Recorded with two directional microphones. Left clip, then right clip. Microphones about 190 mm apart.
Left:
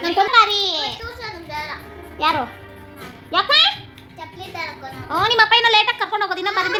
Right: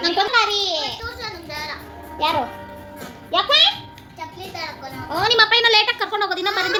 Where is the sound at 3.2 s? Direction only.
45° left (ahead or behind).